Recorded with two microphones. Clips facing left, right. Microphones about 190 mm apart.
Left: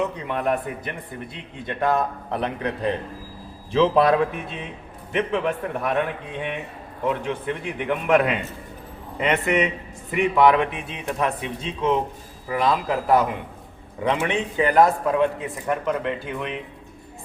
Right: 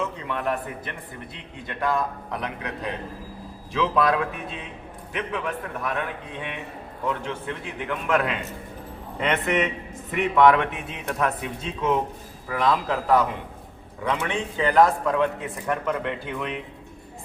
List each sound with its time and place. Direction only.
0.0 s a man's voice: 20° left (ahead or behind)
7.0 s a man's voice: 15° left (ahead or behind)
9.2 s a man's voice: centre (ahead or behind)